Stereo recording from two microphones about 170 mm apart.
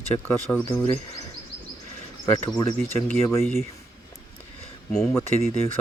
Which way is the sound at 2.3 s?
25° left (ahead or behind).